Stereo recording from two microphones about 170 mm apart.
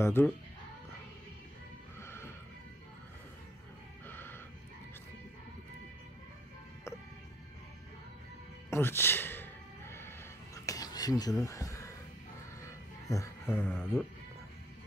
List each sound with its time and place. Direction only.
0.0 s a sound: 15° left (ahead or behind)
2.0 s music: 15° left (ahead or behind)
4.1 s music: 10° left (ahead or behind)
8.6 s music: 15° left (ahead or behind)
11.4 s speech: 20° left (ahead or behind)
13.1 s a sound: 15° left (ahead or behind)